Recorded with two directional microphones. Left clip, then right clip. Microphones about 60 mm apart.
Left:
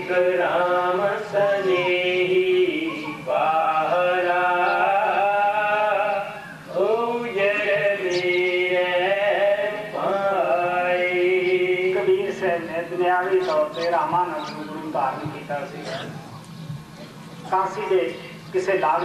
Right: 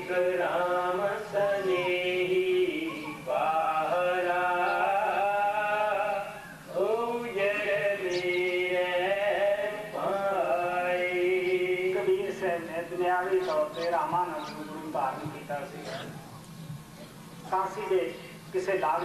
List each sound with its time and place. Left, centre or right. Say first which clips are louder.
0.1 s mantra: left 7 dB; right
6.7 s chant: left 7 dB; right
14.9 s a sound: left 7 dB; right
17.5 s a man's voice: left 7 dB; right